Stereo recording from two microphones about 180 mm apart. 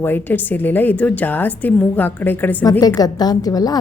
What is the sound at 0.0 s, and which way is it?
A woman's voice, 10° left (ahead or behind).